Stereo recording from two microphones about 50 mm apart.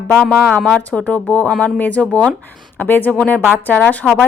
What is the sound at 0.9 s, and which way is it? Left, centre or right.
A woman's voice, left.